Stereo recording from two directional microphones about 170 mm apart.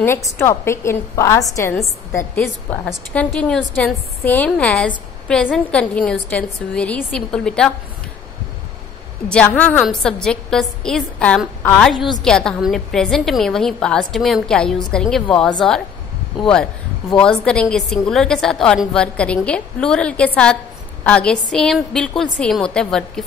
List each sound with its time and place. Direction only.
0.4 s a woman's voice: 15° left (ahead or behind)
9.3 s a woman's voice: 10° left (ahead or behind)
17.1 s a woman's voice: 5° left (ahead or behind)